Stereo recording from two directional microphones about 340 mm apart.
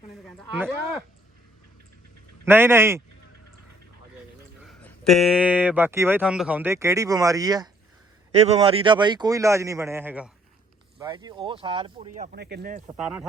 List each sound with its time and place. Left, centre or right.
0.5 s speech: centre
2.4 s a man's voice: centre
4.6 s a man's voice: centre; by 12.8 s right